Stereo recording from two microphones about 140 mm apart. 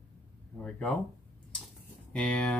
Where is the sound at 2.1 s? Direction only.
10° left (ahead or behind).